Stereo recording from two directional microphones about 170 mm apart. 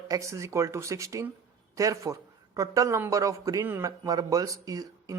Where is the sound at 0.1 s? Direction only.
20° right (ahead or behind).